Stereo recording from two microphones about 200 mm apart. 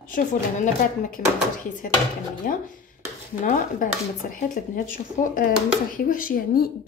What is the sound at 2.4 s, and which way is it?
Speech, 45° left (ahead or behind).